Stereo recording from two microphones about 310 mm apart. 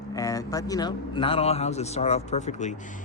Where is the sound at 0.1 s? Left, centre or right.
Centre.